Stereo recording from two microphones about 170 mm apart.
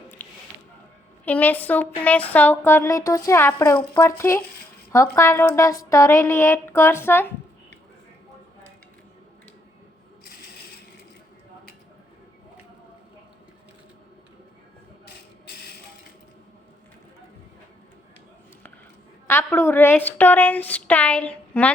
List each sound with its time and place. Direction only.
1.2 s a woman's voice: 10° left (ahead or behind)
19.3 s a woman's voice: 15° left (ahead or behind)